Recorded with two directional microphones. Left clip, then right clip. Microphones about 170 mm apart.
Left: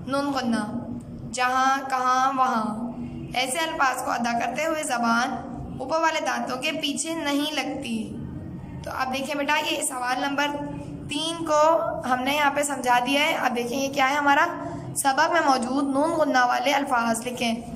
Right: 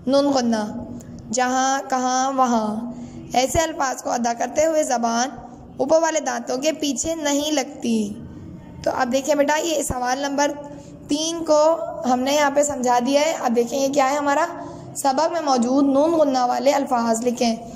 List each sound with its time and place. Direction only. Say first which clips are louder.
0.0 s a woman's voice: right 8 dB; 35° right (ahead or behind)
11.1 s child singing: right 5 dB; 35° right (ahead or behind)
11.3 s a woman's voice: right 2 dB; 30° right (ahead or behind)